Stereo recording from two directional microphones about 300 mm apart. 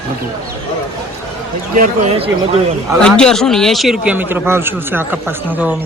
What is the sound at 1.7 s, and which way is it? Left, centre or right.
Speech, right.